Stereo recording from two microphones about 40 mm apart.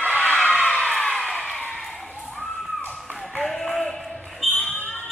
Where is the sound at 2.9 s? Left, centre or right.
Left.